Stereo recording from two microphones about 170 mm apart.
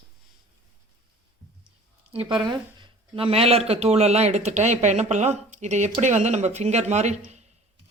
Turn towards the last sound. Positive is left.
turn(degrees=-40)  # may be behind; listen again after turning